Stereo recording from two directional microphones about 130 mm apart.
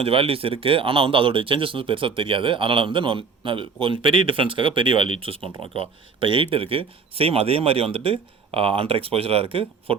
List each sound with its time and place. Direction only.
0.0 s speech: 45° right (ahead or behind)